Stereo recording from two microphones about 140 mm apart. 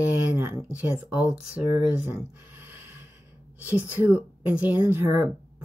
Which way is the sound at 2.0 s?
15° right (ahead or behind).